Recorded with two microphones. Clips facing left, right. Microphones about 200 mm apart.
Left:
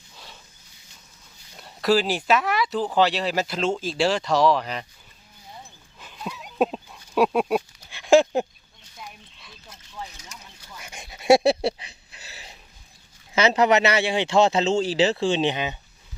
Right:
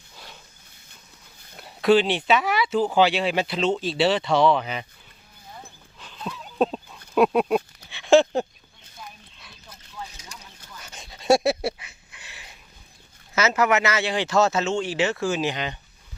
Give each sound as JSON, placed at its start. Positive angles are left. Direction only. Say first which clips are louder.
{"t": 1.5, "sound": "speech", "louder": "right 3 dB", "side_deg": 0}
{"t": 3.9, "sound": "speech", "louder": "even", "side_deg": -5}
{"t": 6.0, "sound": "a sound", "louder": "even", "side_deg": 10}
{"t": 10.8, "sound": "dog", "louder": "left 2 dB", "side_deg": 10}
{"t": 11.1, "sound": "a sound", "louder": "left 2 dB", "side_deg": 10}
{"t": 11.4, "sound": "a sound", "louder": "left 3 dB", "side_deg": 30}
{"t": 13.3, "sound": "speech", "louder": "left 2 dB", "side_deg": 30}
{"t": 14.0, "sound": "speech", "louder": "left 2 dB", "side_deg": 20}
{"t": 15.5, "sound": "speech", "louder": "left 2 dB", "side_deg": 10}